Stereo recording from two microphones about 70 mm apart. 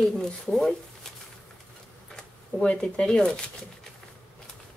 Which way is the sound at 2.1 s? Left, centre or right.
Centre.